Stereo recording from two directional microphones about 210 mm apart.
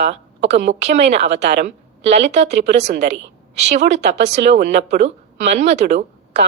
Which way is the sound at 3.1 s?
60° right (ahead or behind).